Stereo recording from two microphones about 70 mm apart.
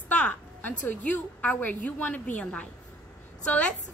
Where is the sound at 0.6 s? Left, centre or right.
Left.